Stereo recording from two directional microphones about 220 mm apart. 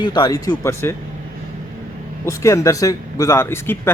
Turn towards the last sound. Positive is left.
turn(degrees=10)  # may be behind; listen again after turning